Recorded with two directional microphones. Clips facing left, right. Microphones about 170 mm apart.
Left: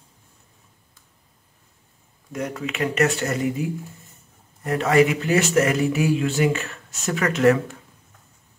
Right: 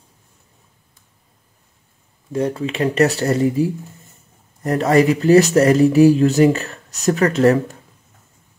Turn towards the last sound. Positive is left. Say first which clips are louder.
# right 4 dB
turn(degrees=-35)  # may be behind; listen again after turning